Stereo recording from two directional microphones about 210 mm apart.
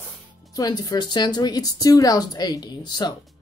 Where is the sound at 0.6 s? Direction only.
20° left (ahead or behind).